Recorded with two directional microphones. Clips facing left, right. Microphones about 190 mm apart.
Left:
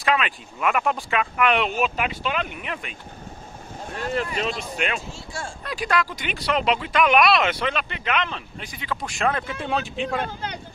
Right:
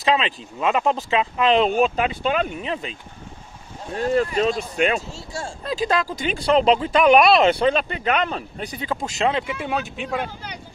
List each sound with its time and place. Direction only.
0.0 s speech: 25° right (ahead or behind)
5.7 s speech: 25° right (ahead or behind)
8.9 s speech: 25° right (ahead or behind)
9.5 s speech: 5° right (ahead or behind)